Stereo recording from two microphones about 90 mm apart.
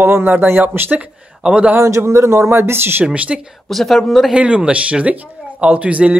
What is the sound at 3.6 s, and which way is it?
Speech, centre (ahead or behind).